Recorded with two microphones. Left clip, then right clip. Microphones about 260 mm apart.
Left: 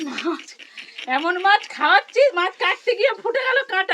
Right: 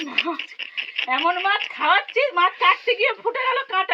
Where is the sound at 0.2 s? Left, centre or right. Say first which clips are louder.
Right 7 dB; centre.